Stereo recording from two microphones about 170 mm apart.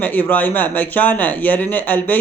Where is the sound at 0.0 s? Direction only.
10° left (ahead or behind).